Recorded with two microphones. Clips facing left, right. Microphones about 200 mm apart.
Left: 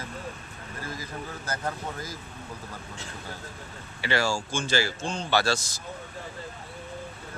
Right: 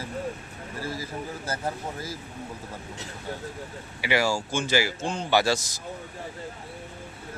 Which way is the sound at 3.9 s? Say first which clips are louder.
Right 2 dB; 15° right (ahead or behind).